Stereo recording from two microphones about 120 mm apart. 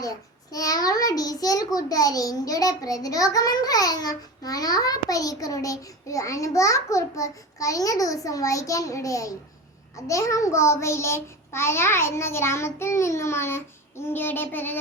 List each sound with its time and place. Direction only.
0.0 s a child's voice: 30° left (ahead or behind)